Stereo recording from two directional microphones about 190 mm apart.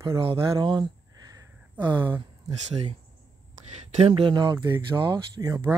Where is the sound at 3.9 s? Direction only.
30° right (ahead or behind).